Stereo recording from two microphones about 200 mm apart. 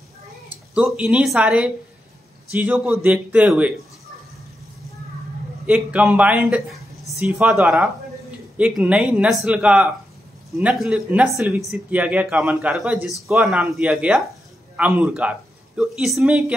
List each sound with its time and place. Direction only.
0.7 s speech: 5° right (ahead or behind)
5.7 s speech: 5° right (ahead or behind)